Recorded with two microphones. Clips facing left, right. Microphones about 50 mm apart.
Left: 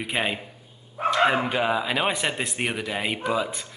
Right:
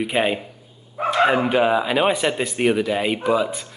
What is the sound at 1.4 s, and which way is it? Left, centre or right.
Mantra, centre.